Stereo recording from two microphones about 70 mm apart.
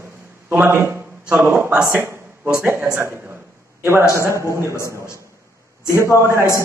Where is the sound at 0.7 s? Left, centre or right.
Right.